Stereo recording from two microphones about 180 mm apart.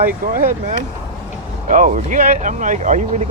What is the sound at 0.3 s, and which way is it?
Speech, 50° right (ahead or behind).